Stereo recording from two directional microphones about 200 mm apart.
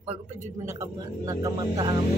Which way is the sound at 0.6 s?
15° right (ahead or behind).